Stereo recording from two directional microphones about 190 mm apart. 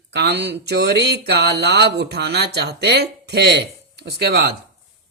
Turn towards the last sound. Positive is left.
turn(degrees=-60)  # may be behind; listen again after turning